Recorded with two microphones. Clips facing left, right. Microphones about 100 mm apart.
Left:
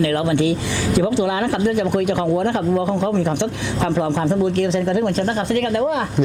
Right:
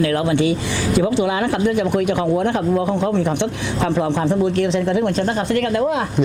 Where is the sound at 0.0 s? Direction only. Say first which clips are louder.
Even; 20° right (ahead or behind).